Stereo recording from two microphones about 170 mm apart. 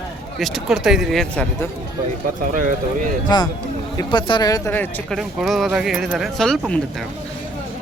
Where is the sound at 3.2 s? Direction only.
25° left (ahead or behind).